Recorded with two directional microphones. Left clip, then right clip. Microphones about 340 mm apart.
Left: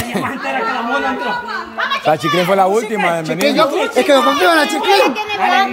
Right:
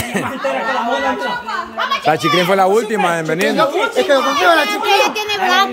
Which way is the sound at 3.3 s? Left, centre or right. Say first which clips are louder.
Left 3 dB; left.